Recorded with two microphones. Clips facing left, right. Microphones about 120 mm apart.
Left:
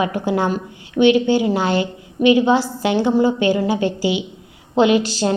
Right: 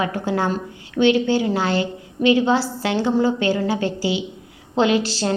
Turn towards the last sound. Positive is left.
turn(degrees=15)  # may be behind; listen again after turning